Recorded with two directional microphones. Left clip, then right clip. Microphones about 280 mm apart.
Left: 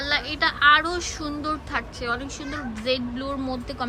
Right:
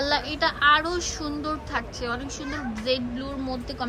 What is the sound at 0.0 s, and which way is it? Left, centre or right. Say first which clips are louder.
A woman's voice: left 1 dB; centre.